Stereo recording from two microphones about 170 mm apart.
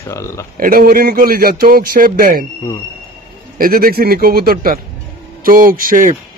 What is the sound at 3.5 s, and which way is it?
A man's voice, 55° right (ahead or behind).